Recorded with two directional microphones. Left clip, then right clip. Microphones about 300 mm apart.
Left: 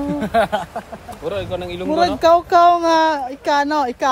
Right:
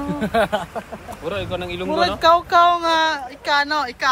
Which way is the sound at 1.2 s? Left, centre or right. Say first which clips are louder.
Left 2 dB; left.